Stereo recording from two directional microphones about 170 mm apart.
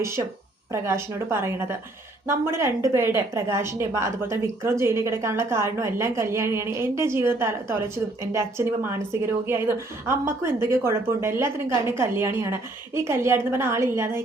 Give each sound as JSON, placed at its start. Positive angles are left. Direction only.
{"t": 0.0, "sound": "a woman's voice", "side_deg": -15}